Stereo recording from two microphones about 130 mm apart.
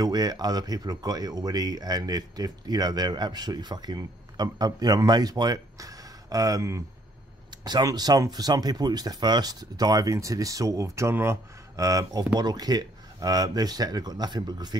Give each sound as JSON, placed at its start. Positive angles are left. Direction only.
{"t": 0.0, "sound": "speech", "side_deg": -30}